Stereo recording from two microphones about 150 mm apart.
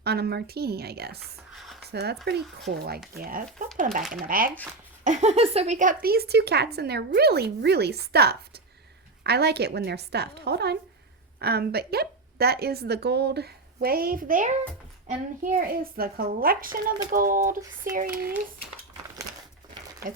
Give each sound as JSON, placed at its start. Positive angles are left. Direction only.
{"t": 0.0, "sound": "a woman's voice", "side_deg": -90}
{"t": 1.5, "sound": "a sound", "side_deg": 0}
{"t": 1.9, "sound": "a woman's voice", "side_deg": -90}
{"t": 3.2, "sound": "a woman's voice", "side_deg": -75}
{"t": 5.0, "sound": "a woman's voice", "side_deg": -50}
{"t": 17.9, "sound": "speech", "side_deg": -80}